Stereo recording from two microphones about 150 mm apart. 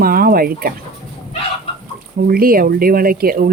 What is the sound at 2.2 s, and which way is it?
Speech, 75° right (ahead or behind).